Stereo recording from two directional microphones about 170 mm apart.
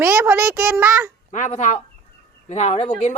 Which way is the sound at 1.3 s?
45° left (ahead or behind).